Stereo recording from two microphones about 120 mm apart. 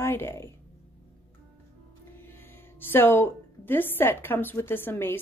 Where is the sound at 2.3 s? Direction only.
15° left (ahead or behind).